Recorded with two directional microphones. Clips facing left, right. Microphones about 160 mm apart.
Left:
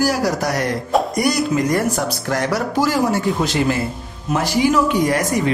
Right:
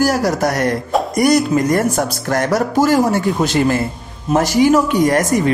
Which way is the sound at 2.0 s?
50° right (ahead or behind).